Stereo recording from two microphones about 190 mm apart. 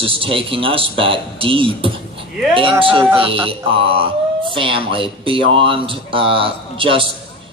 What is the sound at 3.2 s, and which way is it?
Speech, 30° right (ahead or behind).